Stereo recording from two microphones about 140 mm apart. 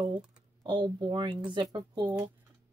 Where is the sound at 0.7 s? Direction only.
30° right (ahead or behind).